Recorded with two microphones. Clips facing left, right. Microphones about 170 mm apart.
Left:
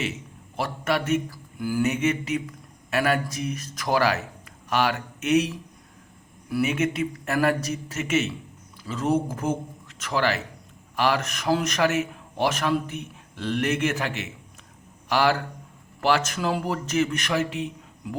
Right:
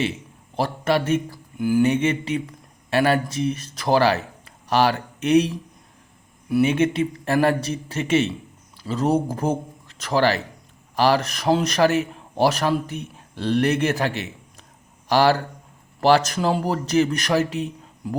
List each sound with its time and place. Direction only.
0.0 s a man's voice: 30° right (ahead or behind)